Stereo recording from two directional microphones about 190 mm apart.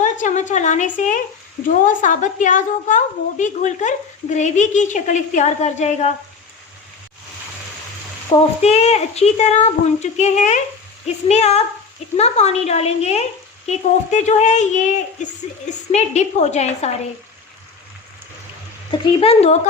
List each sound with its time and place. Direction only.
0.0 s a woman's voice: 40° left (ahead or behind)
8.3 s a woman's voice: 25° left (ahead or behind)
18.9 s speech: 30° left (ahead or behind)